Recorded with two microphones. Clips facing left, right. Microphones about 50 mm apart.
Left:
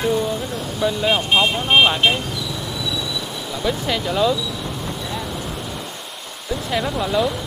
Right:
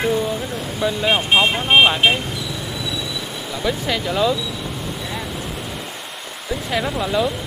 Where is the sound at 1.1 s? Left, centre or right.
Right.